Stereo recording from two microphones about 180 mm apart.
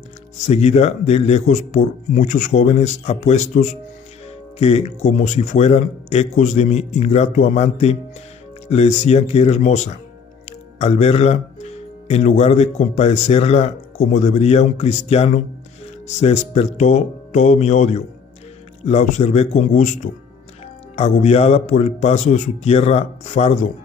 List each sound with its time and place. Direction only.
0.5 s speech: 35° left (ahead or behind)